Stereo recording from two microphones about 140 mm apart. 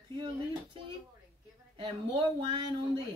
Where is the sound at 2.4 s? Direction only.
35° right (ahead or behind).